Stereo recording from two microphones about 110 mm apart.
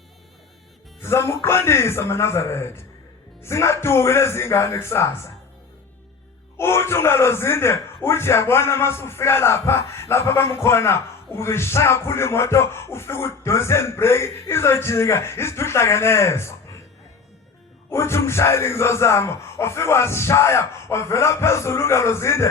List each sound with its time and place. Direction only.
1.0 s speech: 25° left (ahead or behind)
6.6 s speech: 25° left (ahead or behind)
17.9 s speech: 25° left (ahead or behind)